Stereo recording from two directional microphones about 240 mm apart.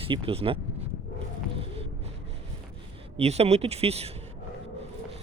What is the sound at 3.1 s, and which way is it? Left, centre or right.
Speech, right.